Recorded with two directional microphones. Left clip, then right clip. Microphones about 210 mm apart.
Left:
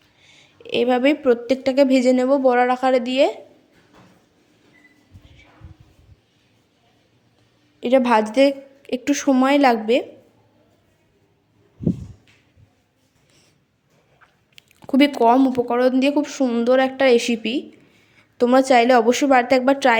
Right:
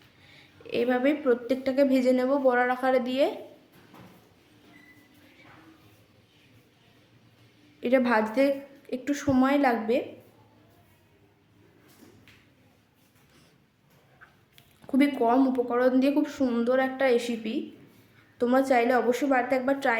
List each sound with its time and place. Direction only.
0.3 s speech: 30° left (ahead or behind)
7.8 s speech: 25° left (ahead or behind)
14.5 s speech: 35° left (ahead or behind)